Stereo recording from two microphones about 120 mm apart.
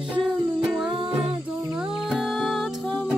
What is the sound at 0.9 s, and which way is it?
Music, 45° right (ahead or behind).